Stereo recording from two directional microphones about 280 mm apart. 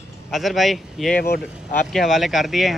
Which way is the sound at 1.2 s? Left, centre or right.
Left.